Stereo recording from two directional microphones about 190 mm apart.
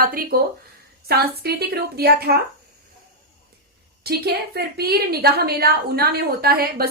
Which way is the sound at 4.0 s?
55° right (ahead or behind).